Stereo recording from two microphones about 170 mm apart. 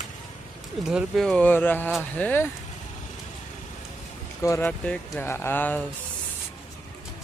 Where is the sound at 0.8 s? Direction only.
Centre (ahead or behind).